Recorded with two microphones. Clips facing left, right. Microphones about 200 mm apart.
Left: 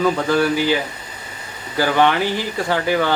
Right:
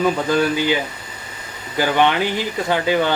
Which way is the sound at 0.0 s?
20° right (ahead or behind).